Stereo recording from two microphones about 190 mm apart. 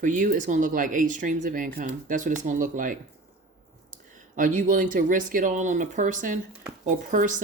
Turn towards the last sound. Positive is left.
turn(degrees=-45)  # may be behind; listen again after turning